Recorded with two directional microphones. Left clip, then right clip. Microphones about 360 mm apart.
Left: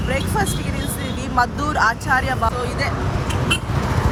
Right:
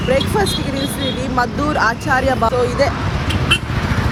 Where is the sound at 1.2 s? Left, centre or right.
Centre.